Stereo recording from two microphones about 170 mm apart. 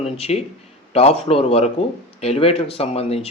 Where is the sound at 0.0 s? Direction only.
40° left (ahead or behind).